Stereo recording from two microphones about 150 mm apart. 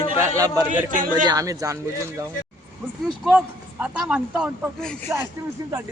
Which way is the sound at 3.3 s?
10° right (ahead or behind).